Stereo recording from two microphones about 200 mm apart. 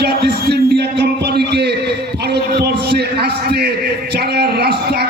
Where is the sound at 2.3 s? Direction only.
55° right (ahead or behind).